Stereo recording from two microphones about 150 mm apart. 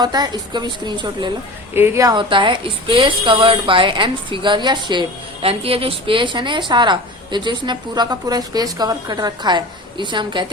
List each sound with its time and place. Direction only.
0.0 s a woman's voice: 25° right (ahead or behind)
1.7 s a woman's voice: 20° right (ahead or behind)
2.1 s a woman's voice: 35° right (ahead or behind)